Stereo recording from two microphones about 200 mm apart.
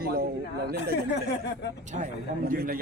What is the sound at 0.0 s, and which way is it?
Speech, 50° right (ahead or behind).